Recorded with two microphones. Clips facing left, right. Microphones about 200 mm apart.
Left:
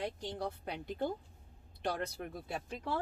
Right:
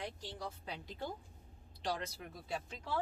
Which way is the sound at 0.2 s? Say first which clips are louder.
Left 6 dB; 60° left (ahead or behind).